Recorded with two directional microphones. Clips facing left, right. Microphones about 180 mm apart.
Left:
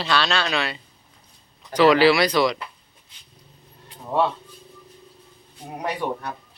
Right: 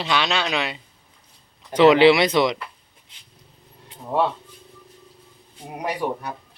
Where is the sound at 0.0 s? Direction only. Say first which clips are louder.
Even; 20° right (ahead or behind).